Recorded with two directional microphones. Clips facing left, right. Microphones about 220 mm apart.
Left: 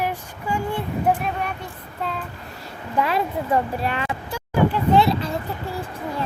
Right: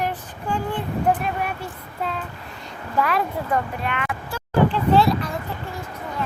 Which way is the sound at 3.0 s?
25° left (ahead or behind).